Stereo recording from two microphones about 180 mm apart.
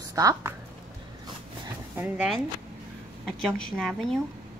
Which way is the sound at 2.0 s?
5° right (ahead or behind).